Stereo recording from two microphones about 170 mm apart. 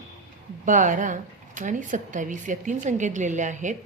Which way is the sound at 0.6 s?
50° right (ahead or behind).